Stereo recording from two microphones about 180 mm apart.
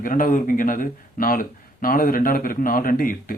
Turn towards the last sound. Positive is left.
turn(degrees=50)  # may be behind; listen again after turning